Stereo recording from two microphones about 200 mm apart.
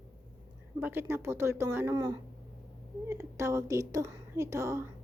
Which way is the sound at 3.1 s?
15° right (ahead or behind).